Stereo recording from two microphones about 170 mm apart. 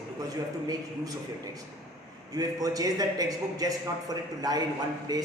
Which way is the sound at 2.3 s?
20° right (ahead or behind).